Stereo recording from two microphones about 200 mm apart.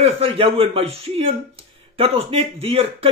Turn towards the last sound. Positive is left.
turn(degrees=-30)  # may be behind; listen again after turning